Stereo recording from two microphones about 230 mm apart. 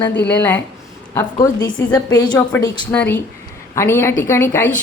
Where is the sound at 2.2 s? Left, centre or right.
Centre.